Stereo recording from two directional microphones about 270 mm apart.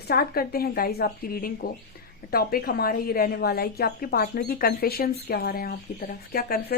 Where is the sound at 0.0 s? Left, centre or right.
Left.